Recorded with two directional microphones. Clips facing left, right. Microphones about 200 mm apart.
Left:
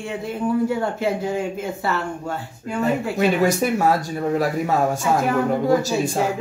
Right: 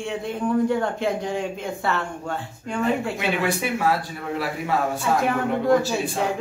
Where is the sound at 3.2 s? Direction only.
40° left (ahead or behind).